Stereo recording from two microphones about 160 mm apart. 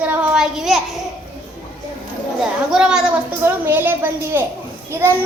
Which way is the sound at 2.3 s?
5° right (ahead or behind).